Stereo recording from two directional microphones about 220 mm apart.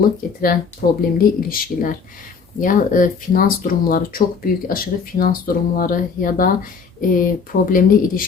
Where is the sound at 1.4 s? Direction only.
40° left (ahead or behind).